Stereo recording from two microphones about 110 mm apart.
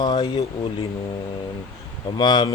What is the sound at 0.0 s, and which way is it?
Speech, 40° left (ahead or behind).